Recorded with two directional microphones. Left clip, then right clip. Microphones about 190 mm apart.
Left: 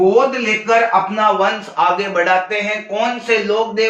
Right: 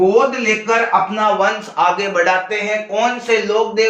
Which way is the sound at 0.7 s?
10° right (ahead or behind).